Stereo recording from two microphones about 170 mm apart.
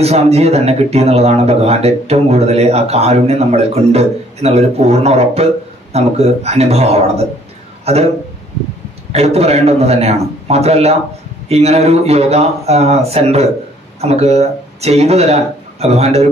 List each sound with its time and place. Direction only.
0.0 s a man's voice: 40° right (ahead or behind)
9.1 s speech: 40° right (ahead or behind)